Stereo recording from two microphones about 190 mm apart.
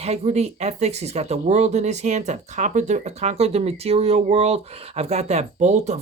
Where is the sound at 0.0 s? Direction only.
35° right (ahead or behind).